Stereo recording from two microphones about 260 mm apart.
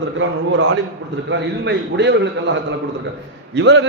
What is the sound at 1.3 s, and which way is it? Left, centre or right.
A man's voice, right.